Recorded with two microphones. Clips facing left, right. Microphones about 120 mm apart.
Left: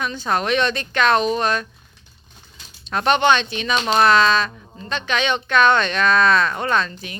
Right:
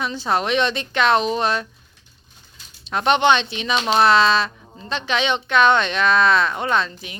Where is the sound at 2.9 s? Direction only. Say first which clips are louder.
Even; 20° right (ahead or behind).